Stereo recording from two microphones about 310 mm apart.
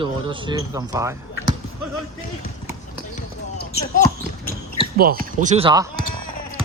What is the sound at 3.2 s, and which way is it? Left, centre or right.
Basketball bounce, left.